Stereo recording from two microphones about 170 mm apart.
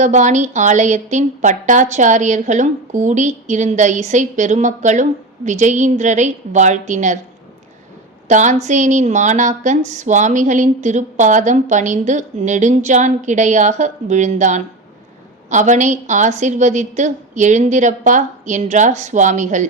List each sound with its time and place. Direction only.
0.0 s a woman's voice: 45° right (ahead or behind)
8.3 s a woman's voice: 45° right (ahead or behind)